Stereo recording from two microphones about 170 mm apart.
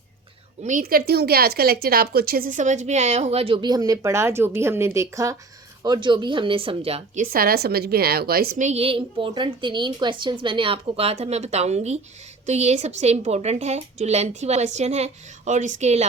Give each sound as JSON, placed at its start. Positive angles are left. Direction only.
{"t": 0.6, "sound": "a woman's voice", "side_deg": -50}
{"t": 7.2, "sound": "a woman's voice", "side_deg": -60}
{"t": 8.6, "sound": "a woman's voice", "side_deg": -35}